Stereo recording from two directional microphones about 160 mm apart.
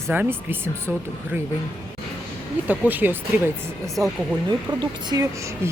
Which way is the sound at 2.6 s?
10° right (ahead or behind).